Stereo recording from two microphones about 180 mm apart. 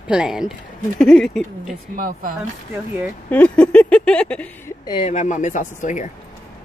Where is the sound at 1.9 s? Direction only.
50° right (ahead or behind).